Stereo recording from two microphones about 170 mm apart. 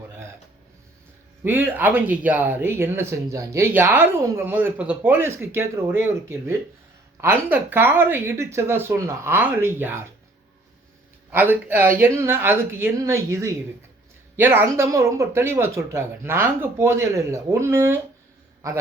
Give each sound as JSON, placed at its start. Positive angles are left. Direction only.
{"t": 1.5, "sound": "speech", "side_deg": -10}
{"t": 11.3, "sound": "a man's voice", "side_deg": -10}